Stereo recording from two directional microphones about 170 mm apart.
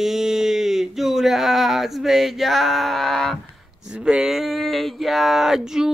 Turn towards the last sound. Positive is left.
turn(degrees=-5)  # may be behind; listen again after turning